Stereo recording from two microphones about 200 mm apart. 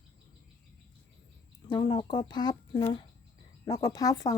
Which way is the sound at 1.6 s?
20° left (ahead or behind).